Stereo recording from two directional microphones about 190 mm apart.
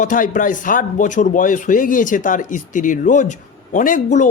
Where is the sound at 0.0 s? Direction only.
45° left (ahead or behind).